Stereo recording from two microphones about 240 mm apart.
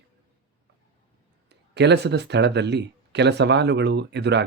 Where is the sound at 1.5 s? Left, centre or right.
Right.